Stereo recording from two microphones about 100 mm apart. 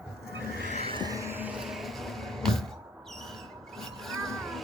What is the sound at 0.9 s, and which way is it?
Music, 40° right (ahead or behind).